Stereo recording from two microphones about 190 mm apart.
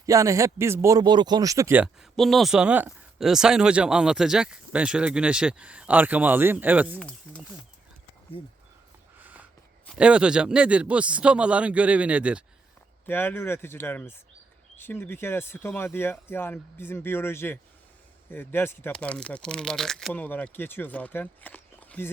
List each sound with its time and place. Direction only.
0.0 s a man's voice: 15° right (ahead or behind)
7.3 s speech: 5° left (ahead or behind)
8.4 s speech: 25° left (ahead or behind)
9.1 s a sound: 10° right (ahead or behind)
9.8 s a man's voice: 5° right (ahead or behind)
13.1 s speech: 10° left (ahead or behind)